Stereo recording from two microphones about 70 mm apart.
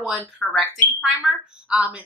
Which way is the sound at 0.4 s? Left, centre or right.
Centre.